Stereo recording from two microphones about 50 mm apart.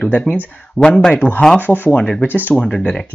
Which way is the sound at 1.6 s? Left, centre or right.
Left.